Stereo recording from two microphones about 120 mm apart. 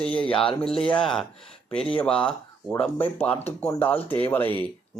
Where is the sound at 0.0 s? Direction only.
10° left (ahead or behind).